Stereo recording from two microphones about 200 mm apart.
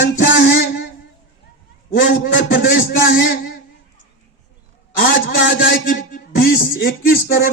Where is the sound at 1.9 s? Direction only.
45° left (ahead or behind).